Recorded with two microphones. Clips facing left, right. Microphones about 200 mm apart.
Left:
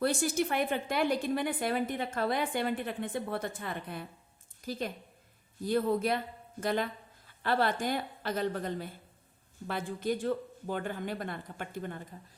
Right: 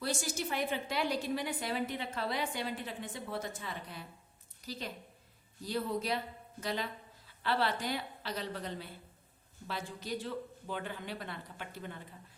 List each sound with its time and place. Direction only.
0.0 s a woman's voice: 55° left (ahead or behind)